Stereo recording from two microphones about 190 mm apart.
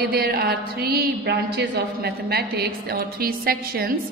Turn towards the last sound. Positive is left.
turn(degrees=-50)  # may be behind; listen again after turning